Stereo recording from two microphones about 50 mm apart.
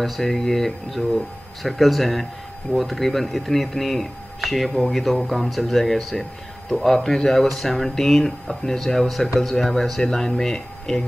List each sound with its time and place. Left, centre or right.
0.0 s speech: centre